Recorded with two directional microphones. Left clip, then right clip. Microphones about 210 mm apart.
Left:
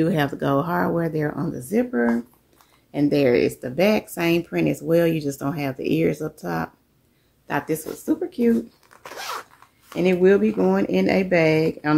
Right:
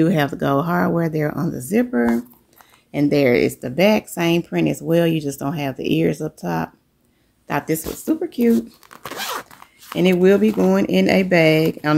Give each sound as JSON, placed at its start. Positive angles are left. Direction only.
{"t": 0.0, "sound": "speech", "side_deg": -35}